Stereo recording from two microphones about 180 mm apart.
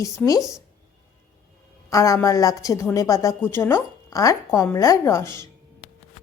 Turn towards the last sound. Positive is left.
turn(degrees=15)  # may be behind; listen again after turning